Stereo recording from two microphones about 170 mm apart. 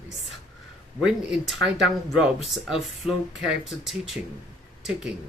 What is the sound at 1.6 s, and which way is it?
Speech, 90° right.